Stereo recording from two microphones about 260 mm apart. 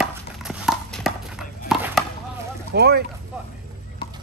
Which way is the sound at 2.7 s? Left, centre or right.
Right.